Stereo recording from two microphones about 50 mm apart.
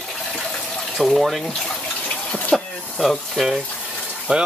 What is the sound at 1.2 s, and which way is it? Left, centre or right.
Speech, centre.